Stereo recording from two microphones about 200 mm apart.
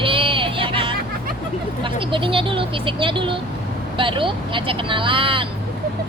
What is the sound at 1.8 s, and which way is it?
Speech, 25° right (ahead or behind).